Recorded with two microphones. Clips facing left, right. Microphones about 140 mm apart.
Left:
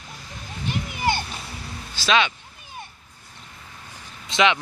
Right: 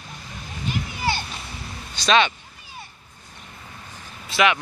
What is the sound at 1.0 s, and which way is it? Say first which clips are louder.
Music: left 3 dB; 15° left (ahead or behind).